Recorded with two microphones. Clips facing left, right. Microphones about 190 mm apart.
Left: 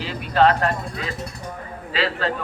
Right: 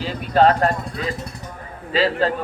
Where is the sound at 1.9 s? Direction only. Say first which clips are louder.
Right 5 dB; 40° right (ahead or behind).